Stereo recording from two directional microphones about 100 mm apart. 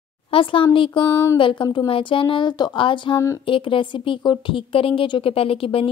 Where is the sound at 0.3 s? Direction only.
60° left (ahead or behind).